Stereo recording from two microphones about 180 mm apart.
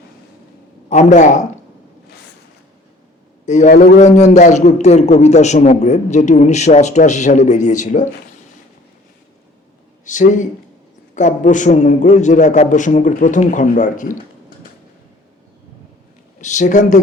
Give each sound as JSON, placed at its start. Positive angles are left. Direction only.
{"t": 0.9, "sound": "a man's voice", "side_deg": 40}
{"t": 3.4, "sound": "a man's voice", "side_deg": 40}
{"t": 10.1, "sound": "a man's voice", "side_deg": 45}
{"t": 16.4, "sound": "a man's voice", "side_deg": 40}